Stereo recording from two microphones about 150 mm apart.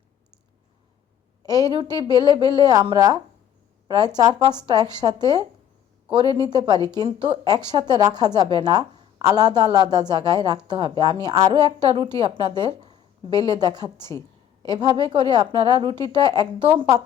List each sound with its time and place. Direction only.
1.5 s a woman's voice: 25° right (ahead or behind)
3.8 s a woman's voice: 25° right (ahead or behind)
6.2 s a woman's voice: 25° left (ahead or behind)
6.5 s a woman's voice: 30° right (ahead or behind)